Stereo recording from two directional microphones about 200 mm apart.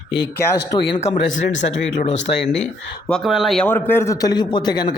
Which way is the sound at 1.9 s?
35° left (ahead or behind).